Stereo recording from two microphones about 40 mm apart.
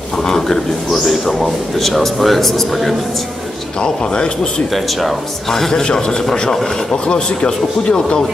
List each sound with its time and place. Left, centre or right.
0.2 s a man's voice: centre
3.8 s a man's voice: left